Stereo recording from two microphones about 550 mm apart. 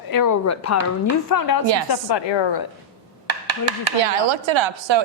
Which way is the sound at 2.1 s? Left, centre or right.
Left.